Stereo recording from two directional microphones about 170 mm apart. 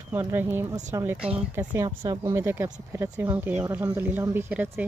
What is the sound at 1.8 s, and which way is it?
Speech, 20° right (ahead or behind).